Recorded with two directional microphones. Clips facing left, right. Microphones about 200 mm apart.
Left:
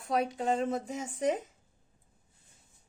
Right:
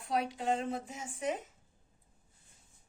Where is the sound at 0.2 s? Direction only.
50° left (ahead or behind).